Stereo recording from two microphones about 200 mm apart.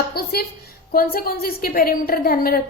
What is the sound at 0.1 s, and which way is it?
A woman's voice, 50° left (ahead or behind).